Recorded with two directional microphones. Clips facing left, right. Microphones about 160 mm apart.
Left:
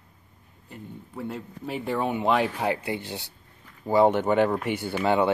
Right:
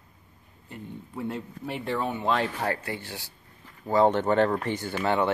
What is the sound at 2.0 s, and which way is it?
Speech, 15° left (ahead or behind).